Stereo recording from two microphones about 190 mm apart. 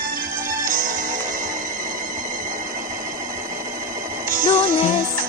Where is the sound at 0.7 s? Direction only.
45° right (ahead or behind).